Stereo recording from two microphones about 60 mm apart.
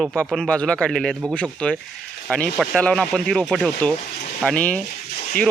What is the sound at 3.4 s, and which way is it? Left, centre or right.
Speech, centre.